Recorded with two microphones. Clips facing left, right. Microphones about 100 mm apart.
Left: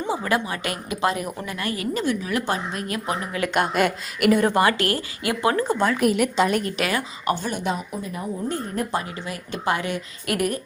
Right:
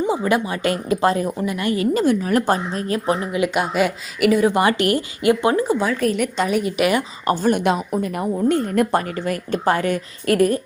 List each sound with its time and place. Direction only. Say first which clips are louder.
0.1 s a woman's voice: right 4 dB; 20° right (ahead or behind)
1.4 s speech: right 7 dB; 20° right (ahead or behind)
3.3 s speech: right 4 dB; 15° right (ahead or behind)
3.6 s a woman's voice: right 1 dB; 5° right (ahead or behind)
4.5 s a woman's voice: right 3 dB; 20° right (ahead or behind)
5.6 s a woman's voice: right 1 dB; centre (ahead or behind)
7.3 s a woman's voice: right 7 dB; 45° right (ahead or behind)
7.8 s a woman's voice: right 8 dB; 65° right (ahead or behind); by 8.9 s 90° right
8.9 s a woman's voice: right 7 dB; 55° right (ahead or behind); by 10.6 s 35° right (ahead or behind)